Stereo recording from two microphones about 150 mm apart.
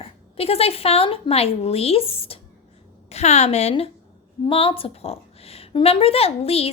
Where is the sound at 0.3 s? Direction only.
40° left (ahead or behind).